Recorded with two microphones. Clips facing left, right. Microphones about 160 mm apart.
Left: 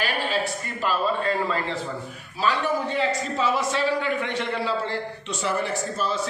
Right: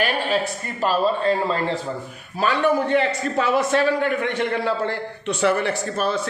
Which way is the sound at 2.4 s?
60° right (ahead or behind).